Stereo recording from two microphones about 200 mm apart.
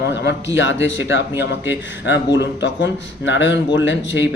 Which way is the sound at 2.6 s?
65° left (ahead or behind).